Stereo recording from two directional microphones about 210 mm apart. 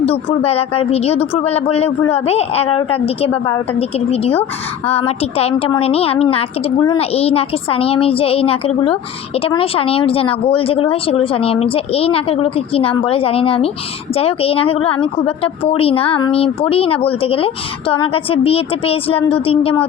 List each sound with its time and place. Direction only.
0.0 s a woman's voice: 30° left (ahead or behind)